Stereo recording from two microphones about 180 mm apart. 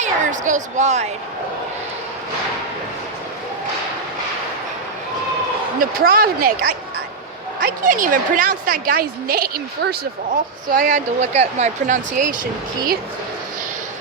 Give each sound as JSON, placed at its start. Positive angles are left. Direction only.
{"t": 0.0, "sound": "a woman's voice", "side_deg": -45}
{"t": 5.8, "sound": "speech", "side_deg": -55}
{"t": 7.6, "sound": "a woman's voice", "side_deg": -50}
{"t": 10.7, "sound": "a woman's voice", "side_deg": -50}